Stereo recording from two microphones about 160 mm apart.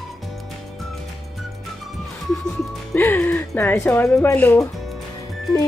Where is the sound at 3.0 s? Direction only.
10° left (ahead or behind).